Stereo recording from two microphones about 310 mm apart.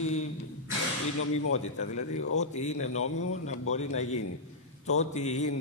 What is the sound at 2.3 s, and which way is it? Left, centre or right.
Speech, left.